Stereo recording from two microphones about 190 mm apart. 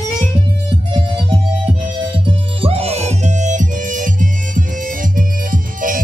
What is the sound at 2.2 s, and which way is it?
Music, 30° right (ahead or behind).